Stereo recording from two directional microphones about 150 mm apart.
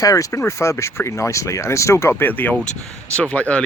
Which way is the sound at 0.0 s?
20° left (ahead or behind).